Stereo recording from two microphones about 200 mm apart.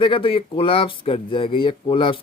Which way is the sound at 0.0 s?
25° left (ahead or behind).